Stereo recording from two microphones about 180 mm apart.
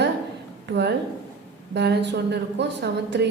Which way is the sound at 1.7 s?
75° right (ahead or behind).